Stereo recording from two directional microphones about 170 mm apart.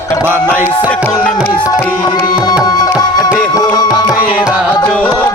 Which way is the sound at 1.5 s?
25° left (ahead or behind).